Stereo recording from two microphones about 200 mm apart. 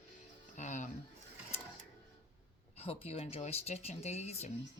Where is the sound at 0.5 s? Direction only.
40° left (ahead or behind).